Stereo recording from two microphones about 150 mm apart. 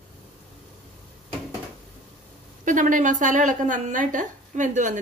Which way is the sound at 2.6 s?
60° right (ahead or behind).